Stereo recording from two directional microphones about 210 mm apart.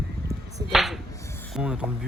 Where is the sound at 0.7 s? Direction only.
Centre (ahead or behind).